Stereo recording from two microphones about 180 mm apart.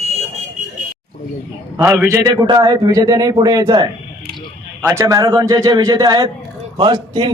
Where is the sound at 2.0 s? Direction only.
20° right (ahead or behind).